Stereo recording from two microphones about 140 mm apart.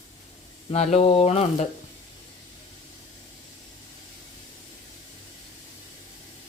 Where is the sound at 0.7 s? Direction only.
50° left (ahead or behind).